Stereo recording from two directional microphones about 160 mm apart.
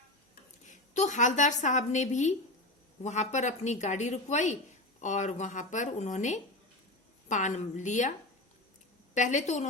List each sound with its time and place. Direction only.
0.7 s speech: 50° left (ahead or behind)
9.1 s speech: 50° left (ahead or behind)